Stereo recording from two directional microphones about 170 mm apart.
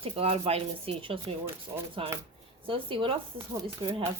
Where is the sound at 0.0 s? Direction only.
35° right (ahead or behind).